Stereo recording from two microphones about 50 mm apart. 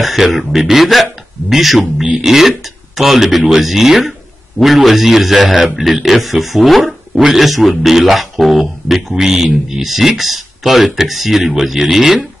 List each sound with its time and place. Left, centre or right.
0.0 s speech: centre